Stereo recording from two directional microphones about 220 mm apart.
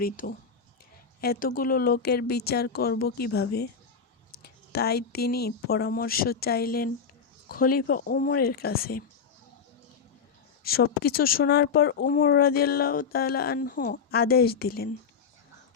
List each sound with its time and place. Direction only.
0.0 s speech: 40° left (ahead or behind)
10.6 s speech: 45° left (ahead or behind)